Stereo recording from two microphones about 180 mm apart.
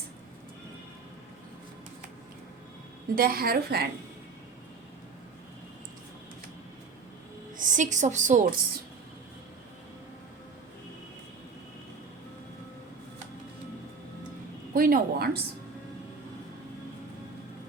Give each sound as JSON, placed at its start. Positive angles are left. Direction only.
{"t": 3.2, "sound": "a woman's voice", "side_deg": -55}
{"t": 7.5, "sound": "a woman's voice", "side_deg": -45}
{"t": 14.7, "sound": "a woman's voice", "side_deg": -55}